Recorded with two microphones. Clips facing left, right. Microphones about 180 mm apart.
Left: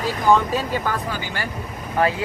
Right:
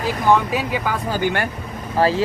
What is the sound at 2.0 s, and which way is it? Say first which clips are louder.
Speech: right 3 dB; 30° right (ahead or behind).